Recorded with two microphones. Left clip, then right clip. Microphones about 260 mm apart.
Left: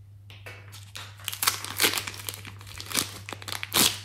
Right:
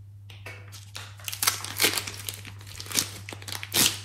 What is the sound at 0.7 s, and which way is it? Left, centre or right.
Crumpling, centre.